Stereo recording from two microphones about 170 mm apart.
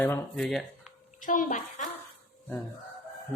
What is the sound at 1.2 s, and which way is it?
Speech, 50° left (ahead or behind).